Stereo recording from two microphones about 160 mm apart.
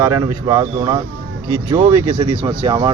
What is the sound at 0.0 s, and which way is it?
Speech, 20° right (ahead or behind).